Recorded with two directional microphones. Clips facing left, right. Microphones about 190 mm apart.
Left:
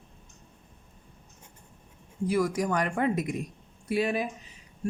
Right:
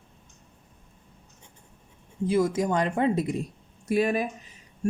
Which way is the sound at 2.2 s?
25° right (ahead or behind).